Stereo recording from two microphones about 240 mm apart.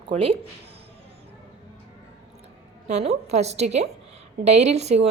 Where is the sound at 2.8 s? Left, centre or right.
Right.